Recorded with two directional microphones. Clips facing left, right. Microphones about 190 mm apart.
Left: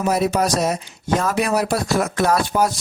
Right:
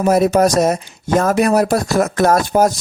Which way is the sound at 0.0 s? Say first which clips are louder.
Right 6 dB; 45° right (ahead or behind).